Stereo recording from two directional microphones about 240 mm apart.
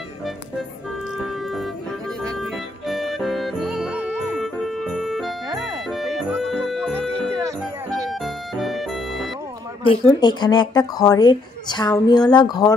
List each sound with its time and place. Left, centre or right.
2.9 s music: centre
7.9 s music: centre
9.8 s speech: centre